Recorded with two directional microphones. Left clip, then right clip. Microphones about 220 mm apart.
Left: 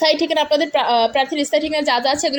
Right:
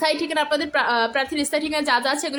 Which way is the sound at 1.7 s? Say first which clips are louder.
Left 3 dB; 30° right (ahead or behind).